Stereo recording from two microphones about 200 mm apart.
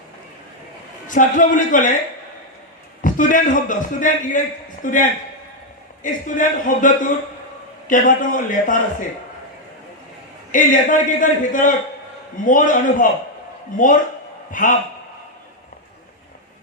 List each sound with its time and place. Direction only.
1.0 s a man's voice: 40° left (ahead or behind)
3.0 s a man's voice: 40° left (ahead or behind)
10.5 s a man's voice: 40° left (ahead or behind)
14.5 s a man's voice: 40° left (ahead or behind)